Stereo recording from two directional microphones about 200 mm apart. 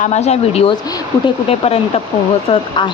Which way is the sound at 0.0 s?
35° left (ahead or behind).